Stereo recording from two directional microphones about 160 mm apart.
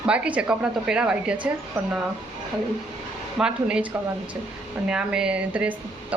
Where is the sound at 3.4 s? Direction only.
5° right (ahead or behind).